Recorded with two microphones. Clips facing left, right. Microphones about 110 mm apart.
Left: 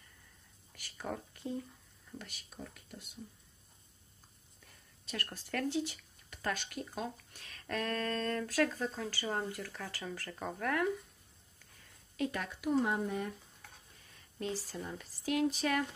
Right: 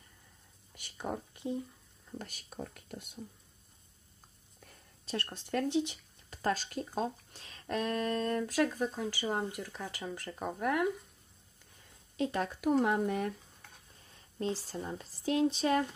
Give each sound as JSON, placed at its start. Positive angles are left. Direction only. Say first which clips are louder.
{"t": 0.7, "sound": "speech", "louder": "right 3 dB", "side_deg": -20}
{"t": 2.1, "sound": "speech", "louder": "right 5 dB", "side_deg": -45}
{"t": 5.0, "sound": "speech", "louder": "right 4 dB", "side_deg": -30}
{"t": 11.8, "sound": "a sound", "louder": "right 2 dB", "side_deg": -25}
{"t": 12.5, "sound": "speech", "louder": "right 3 dB", "side_deg": -55}
{"t": 14.4, "sound": "speech", "louder": "right 3 dB", "side_deg": -30}